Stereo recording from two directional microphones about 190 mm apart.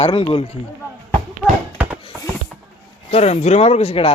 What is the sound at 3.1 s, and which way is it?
Speech, 35° left (ahead or behind).